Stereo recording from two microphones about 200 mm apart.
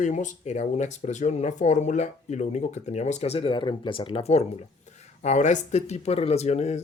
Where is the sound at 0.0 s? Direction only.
40° left (ahead or behind).